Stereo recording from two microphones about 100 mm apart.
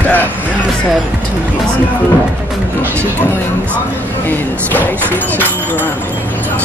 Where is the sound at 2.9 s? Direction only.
15° left (ahead or behind).